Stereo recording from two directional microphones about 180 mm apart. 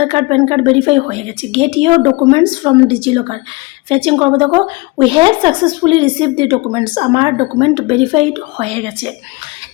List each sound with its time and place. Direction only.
0.0 s a woman's voice: 35° right (ahead or behind)